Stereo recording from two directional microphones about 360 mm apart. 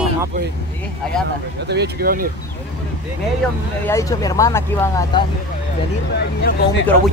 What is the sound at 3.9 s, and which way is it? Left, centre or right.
Speech, centre.